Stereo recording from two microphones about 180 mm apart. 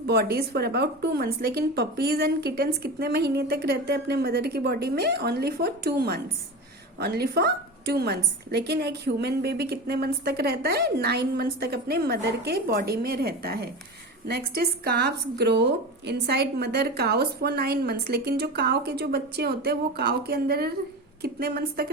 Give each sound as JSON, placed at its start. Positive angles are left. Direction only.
{"t": 0.1, "sound": "a woman's voice", "side_deg": -60}